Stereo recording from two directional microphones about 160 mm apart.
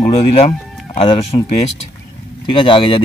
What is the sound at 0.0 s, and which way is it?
Speech, 35° left (ahead or behind).